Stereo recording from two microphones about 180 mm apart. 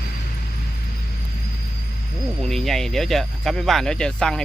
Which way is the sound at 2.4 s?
Centre (ahead or behind).